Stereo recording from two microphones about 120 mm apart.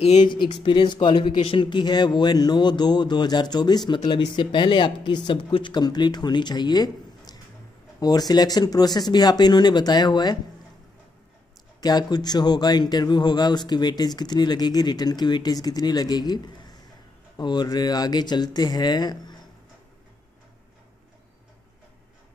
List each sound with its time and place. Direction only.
0.2 s speech: 40° left (ahead or behind)
11.8 s speech: 35° left (ahead or behind)
17.4 s speech: 35° left (ahead or behind)